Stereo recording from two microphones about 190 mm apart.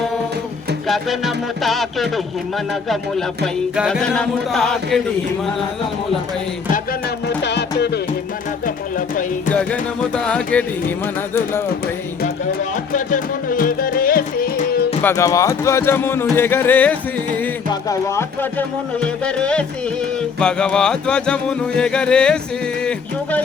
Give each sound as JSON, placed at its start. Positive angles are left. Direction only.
{"t": 0.9, "sound": "music", "side_deg": 0}
{"t": 7.3, "sound": "music", "side_deg": 65}
{"t": 8.6, "sound": "a sound", "side_deg": 45}
{"t": 10.2, "sound": "speech", "side_deg": 5}
{"t": 12.9, "sound": "music", "side_deg": 45}
{"t": 15.0, "sound": "speech", "side_deg": 15}
{"t": 20.4, "sound": "music", "side_deg": 5}
{"t": 22.8, "sound": "speech", "side_deg": 5}